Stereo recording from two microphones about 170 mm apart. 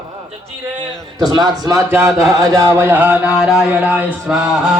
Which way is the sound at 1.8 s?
15° right (ahead or behind).